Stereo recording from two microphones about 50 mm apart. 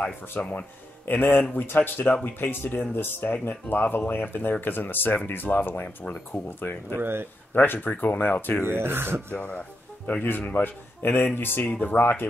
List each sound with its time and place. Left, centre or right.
0.4 s speech: left
7.0 s speech: right
7.5 s speech: left
8.6 s speech: right
9.3 s speech: left
11.6 s speech: left